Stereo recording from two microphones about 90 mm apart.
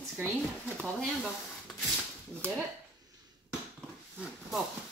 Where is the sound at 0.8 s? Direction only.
10° left (ahead or behind).